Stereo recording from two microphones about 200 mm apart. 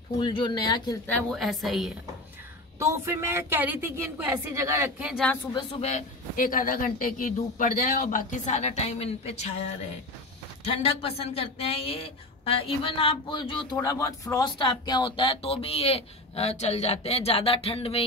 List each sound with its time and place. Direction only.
0.2 s speech: 25° left (ahead or behind)
1.0 s a woman's voice: 5° left (ahead or behind)
2.8 s a woman's voice: 15° right (ahead or behind)
5.5 s speech: 20° left (ahead or behind)
5.9 s a man's voice: 40° left (ahead or behind)
10.6 s speech: 30° left (ahead or behind)